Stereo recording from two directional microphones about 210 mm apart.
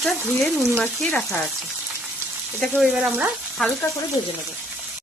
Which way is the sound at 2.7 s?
5° right (ahead or behind).